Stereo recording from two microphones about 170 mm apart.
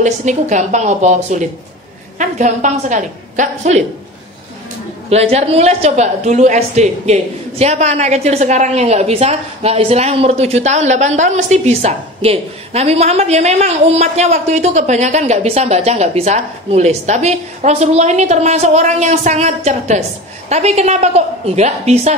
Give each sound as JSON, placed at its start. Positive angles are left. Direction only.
{"t": 0.0, "sound": "a woman's voice", "side_deg": -45}
{"t": 5.1, "sound": "a woman's voice", "side_deg": -40}